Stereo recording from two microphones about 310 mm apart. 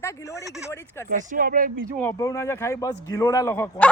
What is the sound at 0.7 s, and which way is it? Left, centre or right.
Speech, centre.